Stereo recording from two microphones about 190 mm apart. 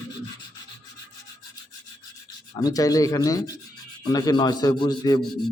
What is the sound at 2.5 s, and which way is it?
A man's voice, 20° left (ahead or behind).